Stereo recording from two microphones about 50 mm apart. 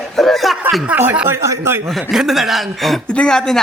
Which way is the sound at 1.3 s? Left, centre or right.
Right.